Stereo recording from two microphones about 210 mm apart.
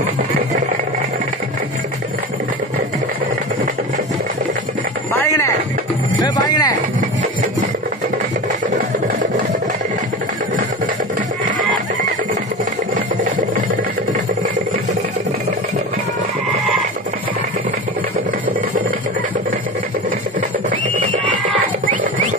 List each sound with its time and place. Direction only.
5.2 s music: 15° left (ahead or behind)